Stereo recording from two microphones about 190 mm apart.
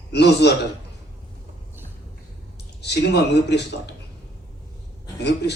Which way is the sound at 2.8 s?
60° left (ahead or behind).